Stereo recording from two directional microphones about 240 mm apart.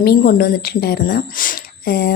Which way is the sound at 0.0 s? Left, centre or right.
Left.